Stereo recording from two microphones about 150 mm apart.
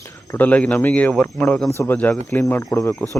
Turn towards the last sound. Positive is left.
turn(degrees=15)  # may be behind; listen again after turning